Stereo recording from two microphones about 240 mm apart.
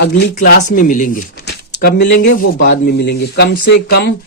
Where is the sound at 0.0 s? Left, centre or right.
Left.